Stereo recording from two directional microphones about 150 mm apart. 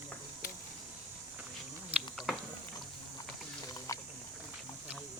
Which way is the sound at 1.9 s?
Centre (ahead or behind).